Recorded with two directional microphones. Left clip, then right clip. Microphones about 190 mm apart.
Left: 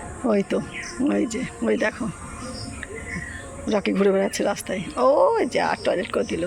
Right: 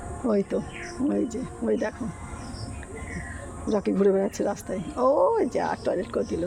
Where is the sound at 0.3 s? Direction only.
Centre (ahead or behind).